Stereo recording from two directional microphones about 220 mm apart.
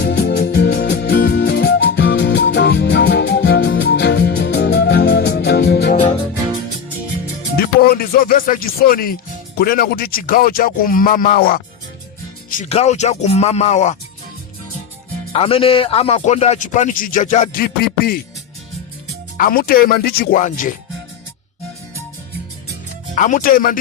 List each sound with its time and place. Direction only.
0.0 s music: 50° left (ahead or behind)
7.5 s music: 45° left (ahead or behind)
9.6 s a man's voice: 45° left (ahead or behind)
15.3 s a man's voice: 25° left (ahead or behind); by 18.2 s 45° left (ahead or behind)
19.4 s a man's voice: 40° left (ahead or behind)
23.1 s a man's voice: 35° left (ahead or behind)